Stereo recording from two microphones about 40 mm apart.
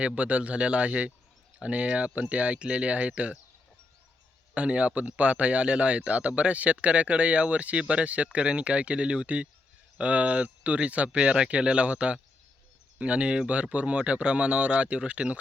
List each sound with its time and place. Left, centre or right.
0.1 s speech: right
4.5 s speech: right